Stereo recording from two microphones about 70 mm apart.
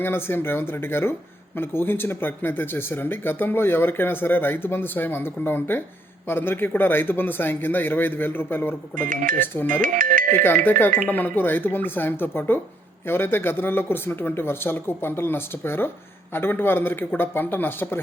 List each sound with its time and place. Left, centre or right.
0.0 s speech: left